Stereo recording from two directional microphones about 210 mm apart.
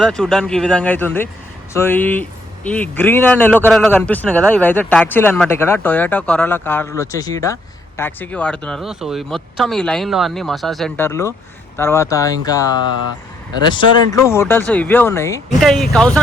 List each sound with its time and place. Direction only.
0.0 s a man's voice: 5° left (ahead or behind)
15.6 s speech: centre (ahead or behind)